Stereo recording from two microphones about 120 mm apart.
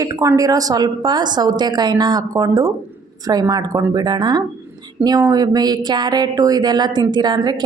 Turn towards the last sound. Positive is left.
turn(degrees=-35)  # may be behind; listen again after turning